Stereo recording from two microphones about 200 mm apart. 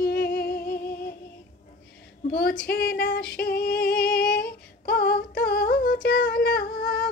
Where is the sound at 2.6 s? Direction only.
55° left (ahead or behind).